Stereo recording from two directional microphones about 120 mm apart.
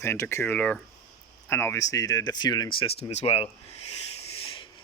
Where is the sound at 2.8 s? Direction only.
55° left (ahead or behind).